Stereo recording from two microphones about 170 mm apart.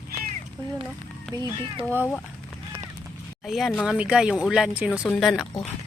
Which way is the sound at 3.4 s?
Centre (ahead or behind).